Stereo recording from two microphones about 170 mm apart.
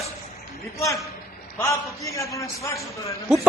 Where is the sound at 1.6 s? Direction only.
20° left (ahead or behind).